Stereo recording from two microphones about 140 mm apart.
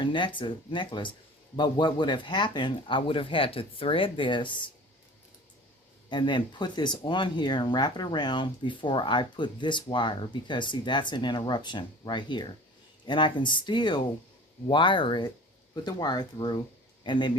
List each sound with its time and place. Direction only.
0.0 s speech: 35° left (ahead or behind)
6.1 s a man's voice: 35° left (ahead or behind)